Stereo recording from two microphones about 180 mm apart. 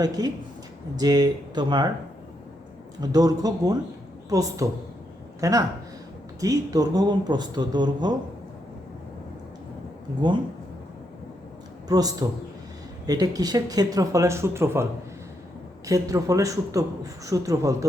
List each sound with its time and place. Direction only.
0.2 s speech: 20° right (ahead or behind)
3.0 s speech: 20° right (ahead or behind)
11.9 s a man's voice: 20° right (ahead or behind)
15.9 s a man's voice: 20° right (ahead or behind)